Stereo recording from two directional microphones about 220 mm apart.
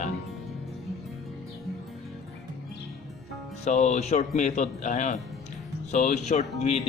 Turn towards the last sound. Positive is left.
turn(degrees=30)  # may be behind; listen again after turning